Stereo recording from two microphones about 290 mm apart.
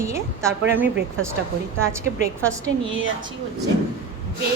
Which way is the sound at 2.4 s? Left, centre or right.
Centre.